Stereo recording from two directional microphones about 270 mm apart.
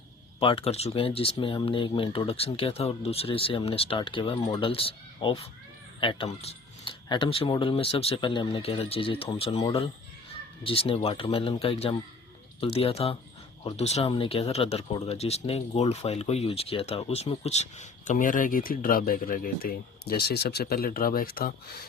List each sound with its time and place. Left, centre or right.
0.3 s speech: left